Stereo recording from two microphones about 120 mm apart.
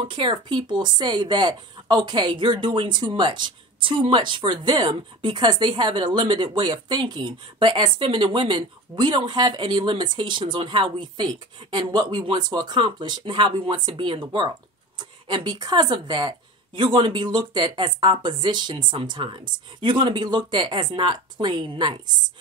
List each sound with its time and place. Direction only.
0.1 s speech: 45° right (ahead or behind)